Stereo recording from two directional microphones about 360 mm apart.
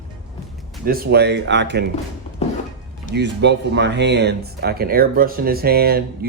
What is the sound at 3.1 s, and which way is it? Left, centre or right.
Speech, right.